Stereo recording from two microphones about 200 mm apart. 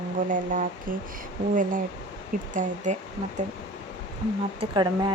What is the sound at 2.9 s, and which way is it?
Speech, 40° right (ahead or behind).